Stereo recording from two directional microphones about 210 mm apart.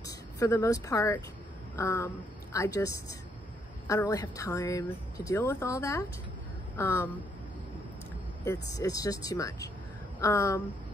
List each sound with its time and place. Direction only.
0.0 s speech: 15° left (ahead or behind)
8.5 s speech: 15° left (ahead or behind)